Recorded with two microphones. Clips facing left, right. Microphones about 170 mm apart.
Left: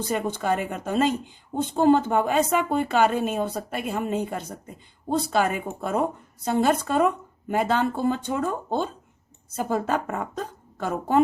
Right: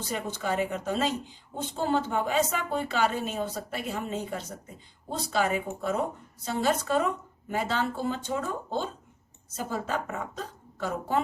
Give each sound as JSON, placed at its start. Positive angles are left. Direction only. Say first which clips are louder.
{"t": 0.0, "sound": "speech", "louder": "left 6 dB", "side_deg": 55}